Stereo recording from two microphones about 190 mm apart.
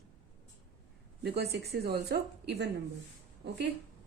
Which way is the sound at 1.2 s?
55° right (ahead or behind).